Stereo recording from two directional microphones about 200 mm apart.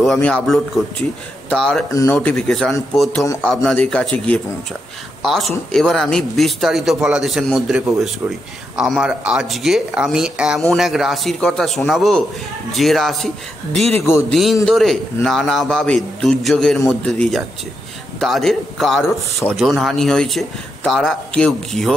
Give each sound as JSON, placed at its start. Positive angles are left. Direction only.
{"t": 0.0, "sound": "a man's voice", "side_deg": 0}
{"t": 1.9, "sound": "a man's voice", "side_deg": 15}
{"t": 2.1, "sound": "a man's voice", "side_deg": 5}
{"t": 14.3, "sound": "a man's voice", "side_deg": 0}